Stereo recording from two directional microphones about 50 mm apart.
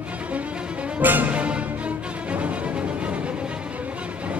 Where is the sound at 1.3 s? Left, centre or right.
Right.